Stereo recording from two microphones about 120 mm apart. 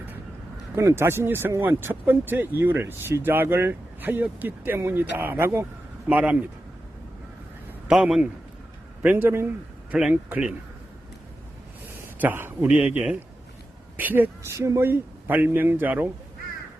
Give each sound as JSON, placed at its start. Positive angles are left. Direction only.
{"t": 0.8, "sound": "speech", "side_deg": -20}
{"t": 7.9, "sound": "a man's voice", "side_deg": -5}
{"t": 9.0, "sound": "speech", "side_deg": -15}
{"t": 12.2, "sound": "speech", "side_deg": -20}